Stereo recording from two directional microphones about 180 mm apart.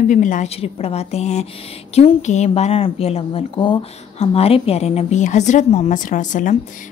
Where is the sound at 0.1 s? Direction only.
45° left (ahead or behind).